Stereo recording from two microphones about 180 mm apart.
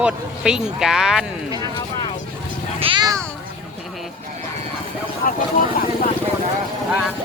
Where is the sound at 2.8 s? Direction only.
25° right (ahead or behind).